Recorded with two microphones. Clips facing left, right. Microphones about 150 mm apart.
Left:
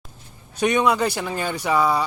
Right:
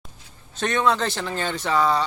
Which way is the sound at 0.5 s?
15° left (ahead or behind).